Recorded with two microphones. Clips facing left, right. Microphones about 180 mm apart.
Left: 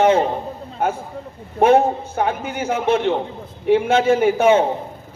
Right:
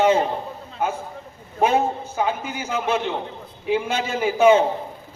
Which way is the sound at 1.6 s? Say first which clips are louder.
Left 6 dB; 55° left (ahead or behind).